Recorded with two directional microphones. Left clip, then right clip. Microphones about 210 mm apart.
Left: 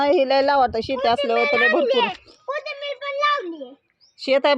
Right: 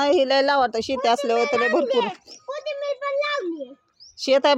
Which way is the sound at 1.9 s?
30° left (ahead or behind).